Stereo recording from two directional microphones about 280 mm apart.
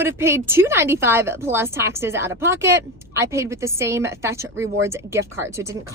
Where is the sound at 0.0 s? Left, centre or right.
Centre.